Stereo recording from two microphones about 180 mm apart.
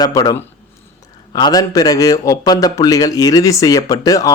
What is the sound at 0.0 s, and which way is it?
Speech, 20° left (ahead or behind).